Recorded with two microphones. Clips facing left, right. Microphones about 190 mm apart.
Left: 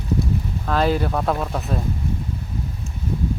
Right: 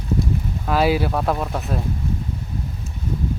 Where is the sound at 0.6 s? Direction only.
10° right (ahead or behind).